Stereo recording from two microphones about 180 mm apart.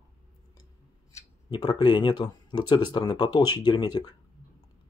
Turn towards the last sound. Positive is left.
turn(degrees=25)  # may be behind; listen again after turning